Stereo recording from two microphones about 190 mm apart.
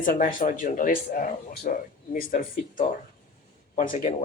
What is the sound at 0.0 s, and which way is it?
Speech, 45° left (ahead or behind).